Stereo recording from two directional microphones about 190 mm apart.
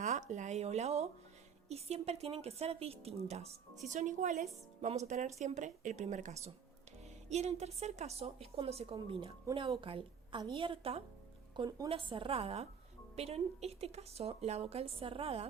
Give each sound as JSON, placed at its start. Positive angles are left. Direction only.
{"t": 0.0, "sound": "a woman's voice", "side_deg": -40}